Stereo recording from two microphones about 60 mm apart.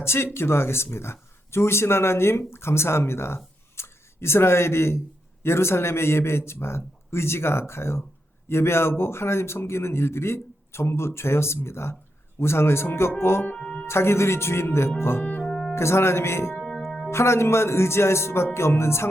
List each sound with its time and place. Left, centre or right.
0.0 s speech: left
13.6 s speech: centre
13.8 s speech: left
15.2 s music: left
15.4 s music: centre
15.7 s speech: left